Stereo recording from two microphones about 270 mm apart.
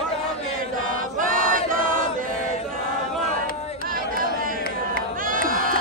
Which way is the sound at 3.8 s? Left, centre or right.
Right.